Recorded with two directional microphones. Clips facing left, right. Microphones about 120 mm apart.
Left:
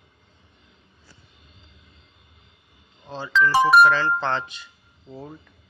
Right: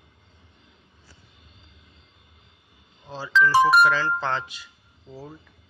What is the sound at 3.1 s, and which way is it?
Speech, 5° right (ahead or behind).